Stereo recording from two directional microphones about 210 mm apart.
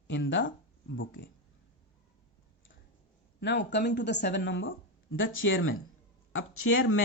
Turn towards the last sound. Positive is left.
turn(degrees=80)